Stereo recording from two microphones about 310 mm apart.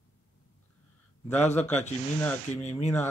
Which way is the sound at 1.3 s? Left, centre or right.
Centre.